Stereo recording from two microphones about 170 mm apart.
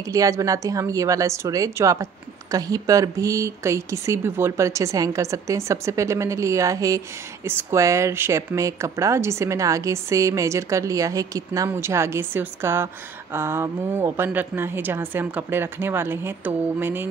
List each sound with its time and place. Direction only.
0.0 s a woman's voice: 20° right (ahead or behind)